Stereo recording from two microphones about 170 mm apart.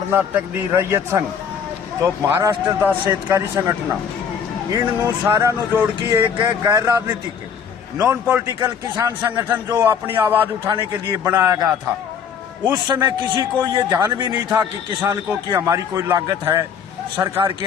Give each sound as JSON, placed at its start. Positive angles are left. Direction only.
{"t": 0.1, "sound": "a man's voice", "side_deg": -10}
{"t": 6.1, "sound": "a man's voice", "side_deg": -25}
{"t": 7.9, "sound": "a man's voice", "side_deg": -10}
{"t": 12.7, "sound": "a man's voice", "side_deg": -25}